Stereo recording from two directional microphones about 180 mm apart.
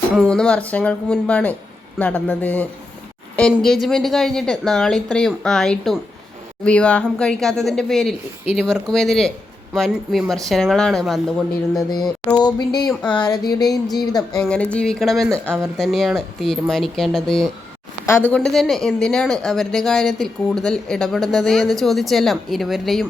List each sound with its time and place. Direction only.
0.2 s a man's voice: 5° left (ahead or behind)
12.4 s speech: 25° left (ahead or behind)
12.9 s speech: 5° left (ahead or behind)
13.1 s speech: 20° left (ahead or behind)
14.3 s speech: 5° left (ahead or behind)